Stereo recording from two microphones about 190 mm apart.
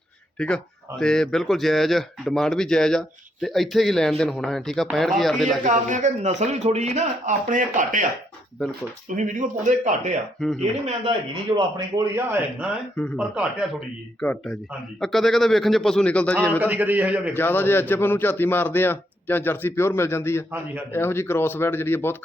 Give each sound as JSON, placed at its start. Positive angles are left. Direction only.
{"t": 0.3, "sound": "speech", "side_deg": 5}
{"t": 5.6, "sound": "speech", "side_deg": -40}
{"t": 9.1, "sound": "speech", "side_deg": -40}
{"t": 12.1, "sound": "a man's voice", "side_deg": -10}
{"t": 16.5, "sound": "a man's voice", "side_deg": -10}
{"t": 17.3, "sound": "a man's voice", "side_deg": 10}